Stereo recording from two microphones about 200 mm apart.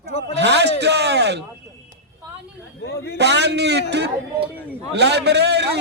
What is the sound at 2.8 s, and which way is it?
Speech, 55° left (ahead or behind).